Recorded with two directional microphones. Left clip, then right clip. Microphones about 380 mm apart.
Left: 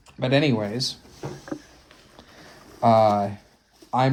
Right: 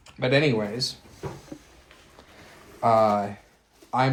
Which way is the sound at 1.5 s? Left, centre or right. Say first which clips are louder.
Left 8 dB; left.